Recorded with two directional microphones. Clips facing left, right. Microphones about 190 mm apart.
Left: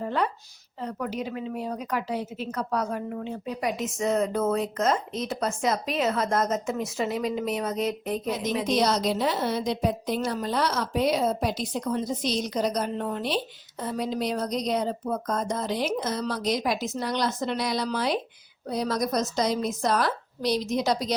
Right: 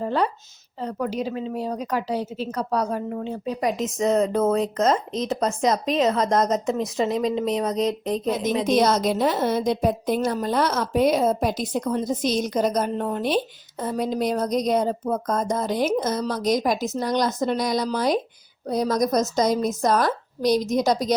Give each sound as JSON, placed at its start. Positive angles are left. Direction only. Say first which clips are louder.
{"t": 0.0, "sound": "a woman's voice", "louder": "right 4 dB", "side_deg": -30}
{"t": 8.6, "sound": "a woman's voice", "louder": "right 4 dB", "side_deg": -50}